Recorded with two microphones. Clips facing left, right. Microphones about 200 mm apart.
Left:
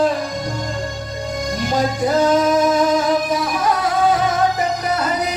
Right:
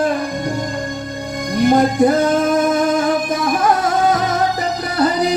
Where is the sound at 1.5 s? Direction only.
55° right (ahead or behind); by 5.4 s 35° right (ahead or behind).